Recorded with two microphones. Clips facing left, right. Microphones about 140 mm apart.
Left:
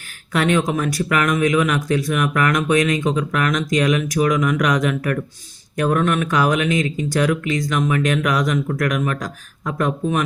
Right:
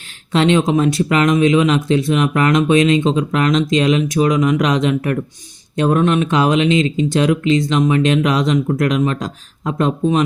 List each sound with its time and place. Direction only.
0.3 s speech: 25° right (ahead or behind)